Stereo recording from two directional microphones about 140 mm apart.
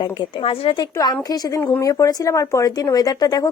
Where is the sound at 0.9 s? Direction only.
30° left (ahead or behind).